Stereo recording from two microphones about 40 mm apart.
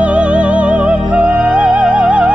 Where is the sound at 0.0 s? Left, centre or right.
Right.